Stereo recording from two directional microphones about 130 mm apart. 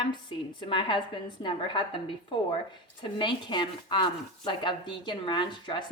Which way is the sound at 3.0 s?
40° left (ahead or behind).